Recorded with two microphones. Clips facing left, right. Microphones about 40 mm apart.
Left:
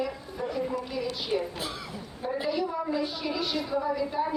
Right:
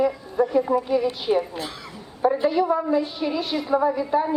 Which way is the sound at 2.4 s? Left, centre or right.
Right.